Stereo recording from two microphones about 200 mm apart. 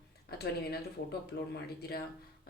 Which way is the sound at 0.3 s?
50° left (ahead or behind).